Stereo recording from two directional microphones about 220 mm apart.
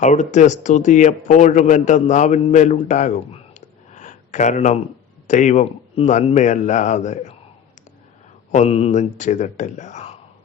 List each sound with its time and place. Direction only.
0.0 s a man's voice: 35° left (ahead or behind)
8.5 s a man's voice: 30° left (ahead or behind)